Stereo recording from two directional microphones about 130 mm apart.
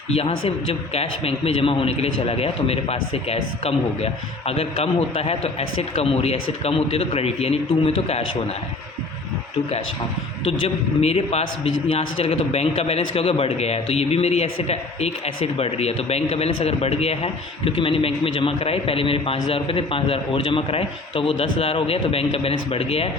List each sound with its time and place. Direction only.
0.1 s a man's voice: 50° left (ahead or behind)
10.4 s a man's voice: 50° left (ahead or behind)